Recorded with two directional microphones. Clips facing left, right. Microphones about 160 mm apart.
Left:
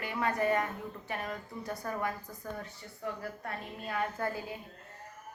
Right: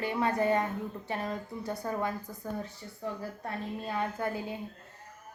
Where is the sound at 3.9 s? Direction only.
20° right (ahead or behind).